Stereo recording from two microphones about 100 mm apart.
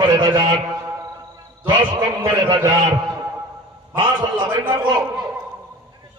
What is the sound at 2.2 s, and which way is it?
Speech, 40° right (ahead or behind).